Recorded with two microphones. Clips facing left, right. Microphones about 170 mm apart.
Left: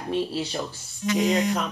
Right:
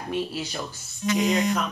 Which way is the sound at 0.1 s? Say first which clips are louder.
Left 3 dB; 30° left (ahead or behind).